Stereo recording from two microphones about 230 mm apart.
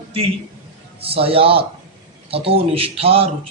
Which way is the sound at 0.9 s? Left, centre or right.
Right.